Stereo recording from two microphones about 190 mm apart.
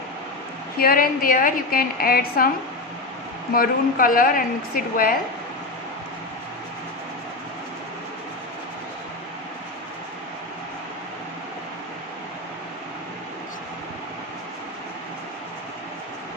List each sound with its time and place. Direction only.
0.7 s a woman's voice: 50° left (ahead or behind)
3.5 s a woman's voice: 50° left (ahead or behind)